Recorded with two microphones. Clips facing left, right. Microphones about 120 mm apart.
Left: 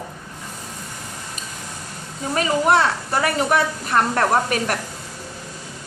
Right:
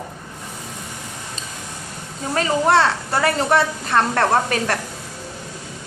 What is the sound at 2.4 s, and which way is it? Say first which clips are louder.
A woman's voice: right 1 dB; 30° right (ahead or behind).